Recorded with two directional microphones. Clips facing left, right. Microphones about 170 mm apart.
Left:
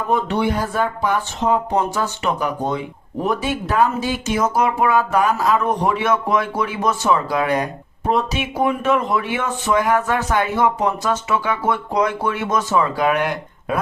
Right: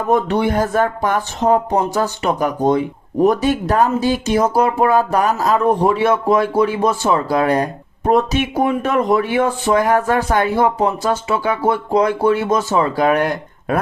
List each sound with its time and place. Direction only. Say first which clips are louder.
0.1 s speech: right 4 dB; 45° right (ahead or behind)
8.1 s speech: right 5 dB; 45° right (ahead or behind)